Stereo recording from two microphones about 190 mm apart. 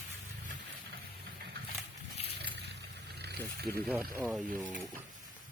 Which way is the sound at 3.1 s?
60° right (ahead or behind).